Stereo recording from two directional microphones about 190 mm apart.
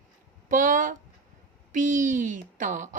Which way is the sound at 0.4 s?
45° right (ahead or behind).